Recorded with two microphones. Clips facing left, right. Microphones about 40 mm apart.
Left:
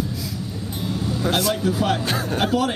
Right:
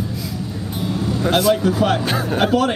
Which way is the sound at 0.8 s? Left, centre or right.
Centre.